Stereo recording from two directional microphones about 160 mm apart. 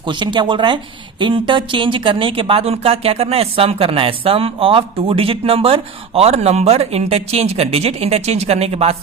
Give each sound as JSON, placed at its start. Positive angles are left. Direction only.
{"t": 0.1, "sound": "speech", "side_deg": -30}